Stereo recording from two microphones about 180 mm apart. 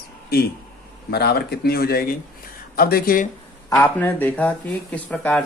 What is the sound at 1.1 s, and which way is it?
Speech, 65° left (ahead or behind).